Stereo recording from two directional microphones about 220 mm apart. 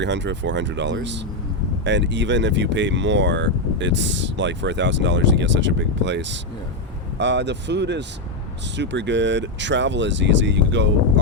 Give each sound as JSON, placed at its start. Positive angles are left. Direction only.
{"t": 0.0, "sound": "speech", "side_deg": -55}